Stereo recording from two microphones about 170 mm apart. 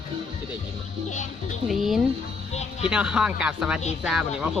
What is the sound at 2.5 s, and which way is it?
Music, 40° left (ahead or behind).